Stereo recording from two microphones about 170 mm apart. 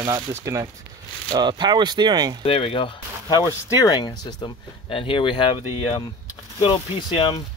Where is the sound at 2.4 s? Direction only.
30° left (ahead or behind).